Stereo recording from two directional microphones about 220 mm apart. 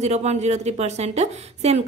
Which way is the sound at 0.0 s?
30° right (ahead or behind).